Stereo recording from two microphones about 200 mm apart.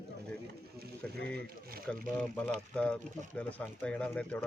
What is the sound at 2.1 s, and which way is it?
Speech, 10° left (ahead or behind).